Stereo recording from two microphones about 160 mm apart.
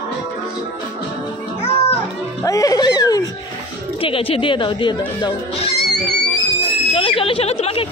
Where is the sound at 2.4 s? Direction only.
20° left (ahead or behind).